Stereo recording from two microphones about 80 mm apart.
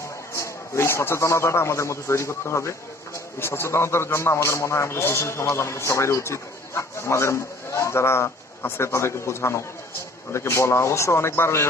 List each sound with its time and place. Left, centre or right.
0.3 s a man's voice: left